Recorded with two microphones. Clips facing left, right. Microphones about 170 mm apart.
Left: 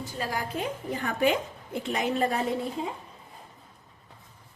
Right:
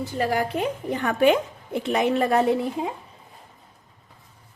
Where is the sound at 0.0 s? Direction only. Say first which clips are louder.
Right 8 dB; 65° right (ahead or behind).